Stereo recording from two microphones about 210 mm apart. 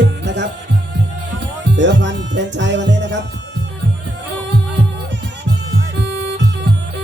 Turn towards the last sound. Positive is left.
turn(degrees=-55)  # may be behind; listen again after turning